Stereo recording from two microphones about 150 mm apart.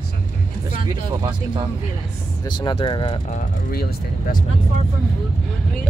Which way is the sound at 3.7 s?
90° left.